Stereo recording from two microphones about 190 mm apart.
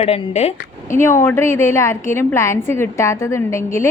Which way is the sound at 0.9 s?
15° left (ahead or behind).